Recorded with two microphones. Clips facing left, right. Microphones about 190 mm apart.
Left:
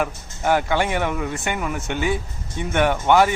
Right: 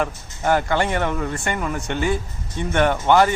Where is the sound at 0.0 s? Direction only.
5° left (ahead or behind).